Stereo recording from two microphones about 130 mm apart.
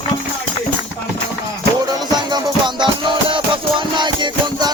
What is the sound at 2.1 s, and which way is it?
Music, 35° right (ahead or behind).